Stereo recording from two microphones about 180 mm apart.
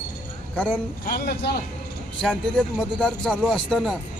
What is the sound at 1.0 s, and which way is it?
Speech, 60° left (ahead or behind).